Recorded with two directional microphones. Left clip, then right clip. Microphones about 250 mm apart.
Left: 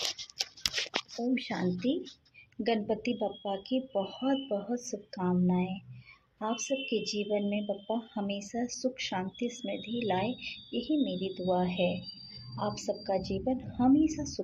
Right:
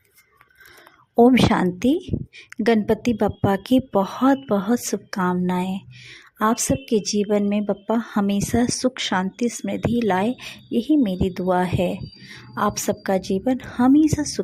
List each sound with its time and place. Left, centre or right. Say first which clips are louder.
1.3 s a woman's voice: right 14 dB; right